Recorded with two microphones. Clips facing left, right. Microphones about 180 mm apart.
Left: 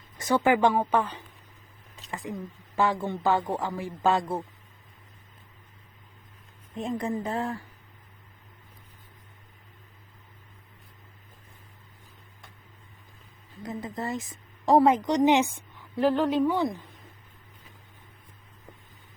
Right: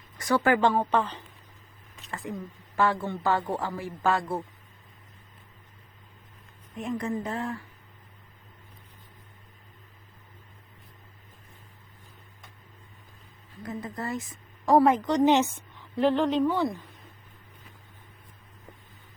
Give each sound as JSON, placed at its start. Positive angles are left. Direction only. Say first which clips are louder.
{"t": 0.2, "sound": "a man's voice", "louder": "left 1 dB", "side_deg": 25}
{"t": 6.7, "sound": "speech", "louder": "left 1 dB", "side_deg": 30}
{"t": 13.6, "sound": "a woman's voice", "louder": "left 1 dB", "side_deg": 20}